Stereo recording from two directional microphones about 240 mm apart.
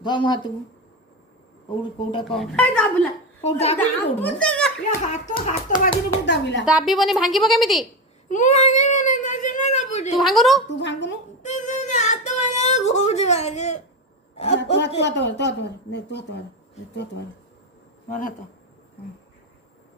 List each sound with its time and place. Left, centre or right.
0.0 s speech: centre
2.4 s a woman's voice: centre
3.4 s a woman's voice: left
3.8 s a woman's voice: centre
5.0 s speech: left
6.2 s a woman's voice: left
6.7 s a woman's voice: centre
8.3 s a sound: left
10.2 s a woman's voice: centre
10.8 s a woman's voice: left
11.4 s singing: left
14.6 s a woman's voice: left
18.1 s speech: left